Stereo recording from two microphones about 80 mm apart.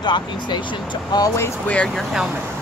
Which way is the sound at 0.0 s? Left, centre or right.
Left.